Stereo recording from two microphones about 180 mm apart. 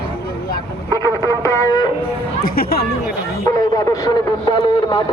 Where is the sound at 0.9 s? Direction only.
15° left (ahead or behind).